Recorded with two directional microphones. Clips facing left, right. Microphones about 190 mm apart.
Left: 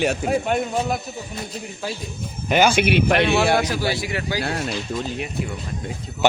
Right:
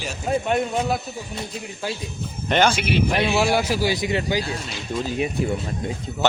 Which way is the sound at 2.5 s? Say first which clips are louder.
Left 1 dB; 5° left (ahead or behind).